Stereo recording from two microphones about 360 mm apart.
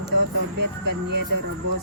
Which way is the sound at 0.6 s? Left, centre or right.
Right.